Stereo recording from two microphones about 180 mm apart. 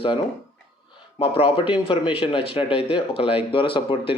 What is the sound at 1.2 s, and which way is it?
Speech, 30° left (ahead or behind).